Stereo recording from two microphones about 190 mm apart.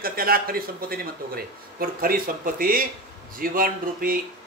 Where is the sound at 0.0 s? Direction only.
50° right (ahead or behind).